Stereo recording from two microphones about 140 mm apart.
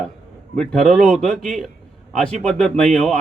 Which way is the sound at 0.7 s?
Centre (ahead or behind).